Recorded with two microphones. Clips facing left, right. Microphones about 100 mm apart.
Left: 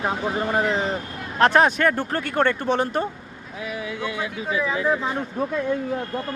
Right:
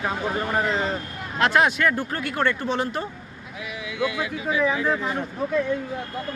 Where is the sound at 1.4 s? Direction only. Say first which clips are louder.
Left 3 dB; 40° left (ahead or behind).